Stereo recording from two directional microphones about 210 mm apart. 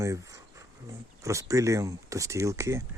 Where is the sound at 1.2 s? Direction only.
15° right (ahead or behind).